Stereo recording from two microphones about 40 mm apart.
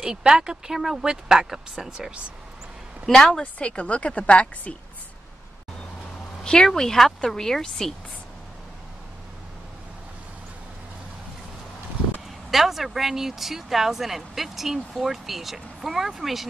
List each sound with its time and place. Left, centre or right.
0.0 s speech: centre
3.1 s speech: centre
3.5 s a woman's voice: left
6.4 s speech: centre
12.4 s speech: centre